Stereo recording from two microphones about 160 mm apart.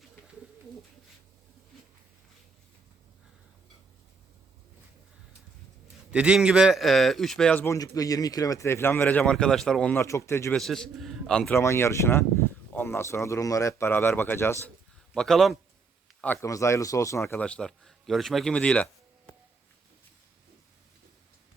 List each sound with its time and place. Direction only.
6.1 s a man's voice: 5° right (ahead or behind); by 10.6 s 15° left (ahead or behind)
10.6 s a man's voice: centre (ahead or behind)
15.1 s a man's voice: 5° left (ahead or behind)
16.2 s a man's voice: 15° left (ahead or behind)